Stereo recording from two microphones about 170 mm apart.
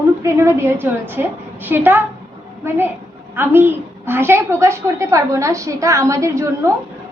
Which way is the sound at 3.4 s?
15° right (ahead or behind).